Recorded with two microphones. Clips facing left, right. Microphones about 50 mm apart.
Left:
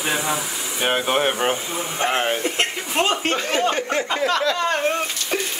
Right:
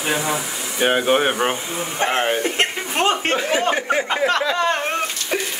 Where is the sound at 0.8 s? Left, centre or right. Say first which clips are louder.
Right 3 dB; centre.